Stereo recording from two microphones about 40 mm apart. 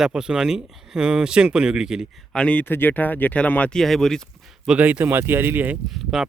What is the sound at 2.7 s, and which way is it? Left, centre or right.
Speech, left.